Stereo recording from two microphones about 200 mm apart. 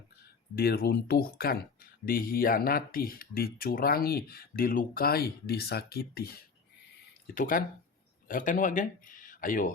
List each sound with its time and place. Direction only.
0.5 s speech: 50° left (ahead or behind)